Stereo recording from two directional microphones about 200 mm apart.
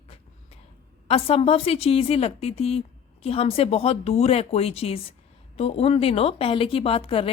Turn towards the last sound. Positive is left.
turn(degrees=30)  # may be behind; listen again after turning